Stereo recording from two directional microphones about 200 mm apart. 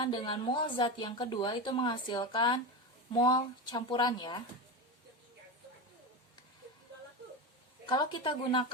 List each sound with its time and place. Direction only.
0.0 s a woman's voice: 25° left (ahead or behind)
7.9 s a woman's voice: 20° left (ahead or behind)